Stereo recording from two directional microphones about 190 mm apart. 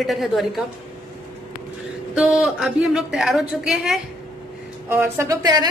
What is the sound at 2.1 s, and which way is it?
A woman's voice, 5° right (ahead or behind).